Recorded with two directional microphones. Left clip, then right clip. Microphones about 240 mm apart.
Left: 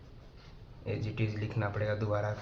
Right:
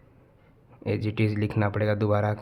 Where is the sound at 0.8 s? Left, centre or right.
Right.